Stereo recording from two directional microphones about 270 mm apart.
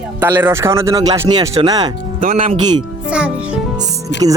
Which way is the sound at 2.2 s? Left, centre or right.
Right.